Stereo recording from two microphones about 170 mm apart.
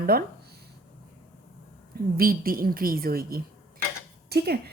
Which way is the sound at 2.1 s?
60° right (ahead or behind).